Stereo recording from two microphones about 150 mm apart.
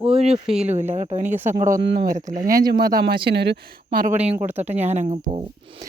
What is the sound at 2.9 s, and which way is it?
Speech, 90° right.